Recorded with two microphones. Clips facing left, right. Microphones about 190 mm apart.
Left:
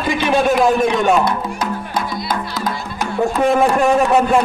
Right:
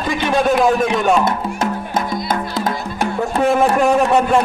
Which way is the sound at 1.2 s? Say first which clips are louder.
Right 1 dB; 25° right (ahead or behind).